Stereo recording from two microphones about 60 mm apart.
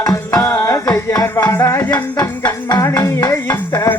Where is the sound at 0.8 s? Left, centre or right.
Left.